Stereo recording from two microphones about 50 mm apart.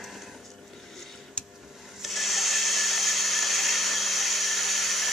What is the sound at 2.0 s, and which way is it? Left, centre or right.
Blender, centre.